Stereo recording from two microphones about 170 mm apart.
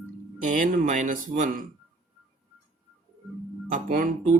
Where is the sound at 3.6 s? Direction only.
55° right (ahead or behind).